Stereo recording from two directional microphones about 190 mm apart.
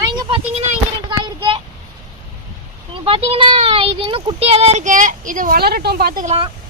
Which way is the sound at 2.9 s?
30° right (ahead or behind).